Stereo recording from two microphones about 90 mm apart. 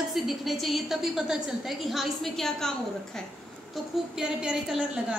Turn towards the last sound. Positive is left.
turn(degrees=-10)  # may be behind; listen again after turning